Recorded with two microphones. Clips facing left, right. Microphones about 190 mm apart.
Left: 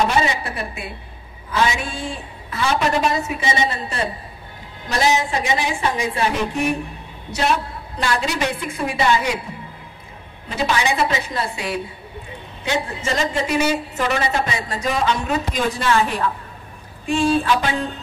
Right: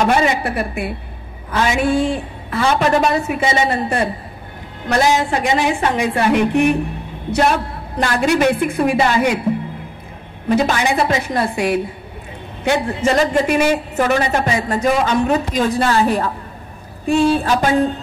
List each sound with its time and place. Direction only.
0.1 s a woman's voice: 55° right (ahead or behind)
10.5 s a woman's voice: 50° right (ahead or behind)
17.4 s mantra: 40° right (ahead or behind)